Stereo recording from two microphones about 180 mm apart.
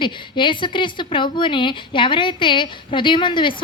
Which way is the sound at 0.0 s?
25° left (ahead or behind).